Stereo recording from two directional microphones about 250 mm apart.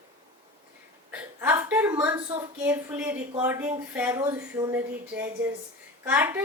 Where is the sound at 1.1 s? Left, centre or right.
Centre.